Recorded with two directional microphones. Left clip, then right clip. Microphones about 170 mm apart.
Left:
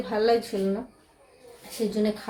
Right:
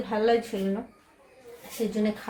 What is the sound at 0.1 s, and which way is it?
Speech, 10° left (ahead or behind).